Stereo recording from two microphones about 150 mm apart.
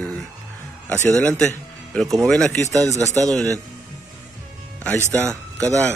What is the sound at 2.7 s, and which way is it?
Speech, 20° right (ahead or behind).